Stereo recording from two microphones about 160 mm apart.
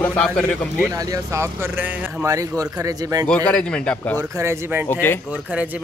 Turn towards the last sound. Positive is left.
turn(degrees=-10)  # may be behind; listen again after turning